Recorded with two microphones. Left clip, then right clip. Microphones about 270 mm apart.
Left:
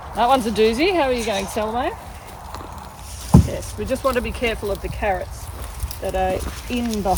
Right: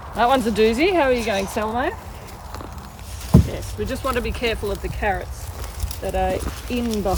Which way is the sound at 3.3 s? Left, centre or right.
Left.